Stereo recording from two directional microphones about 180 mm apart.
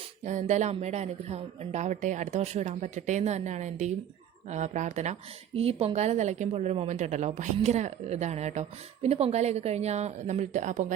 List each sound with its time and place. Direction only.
0.3 s a woman's voice: 40° right (ahead or behind)